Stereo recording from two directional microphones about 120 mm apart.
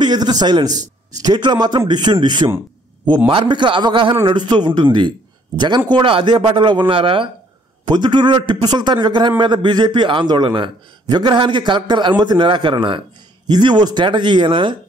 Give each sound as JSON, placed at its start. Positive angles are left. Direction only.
{"t": 0.0, "sound": "a man's voice", "side_deg": -35}
{"t": 5.9, "sound": "a man's voice", "side_deg": -45}